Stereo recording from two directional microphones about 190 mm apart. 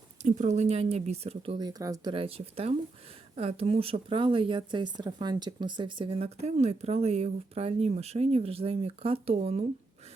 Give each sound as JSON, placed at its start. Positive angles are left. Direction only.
{"t": 0.2, "sound": "speech", "side_deg": -40}
{"t": 2.1, "sound": "speech", "side_deg": -30}